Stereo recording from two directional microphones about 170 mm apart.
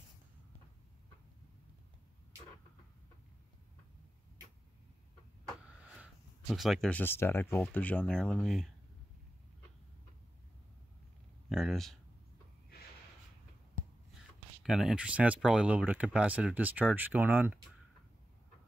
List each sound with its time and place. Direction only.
6.4 s speech: centre (ahead or behind)
11.4 s speech: centre (ahead or behind)
14.6 s speech: centre (ahead or behind)